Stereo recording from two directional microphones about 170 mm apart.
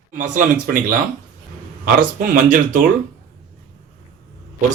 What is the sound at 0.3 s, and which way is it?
Speech, 55° right (ahead or behind).